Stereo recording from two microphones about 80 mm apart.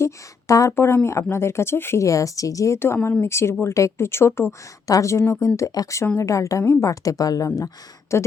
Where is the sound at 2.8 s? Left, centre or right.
Left.